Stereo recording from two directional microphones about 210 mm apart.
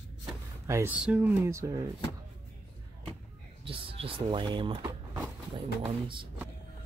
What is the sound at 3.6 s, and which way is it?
Speech, 25° right (ahead or behind).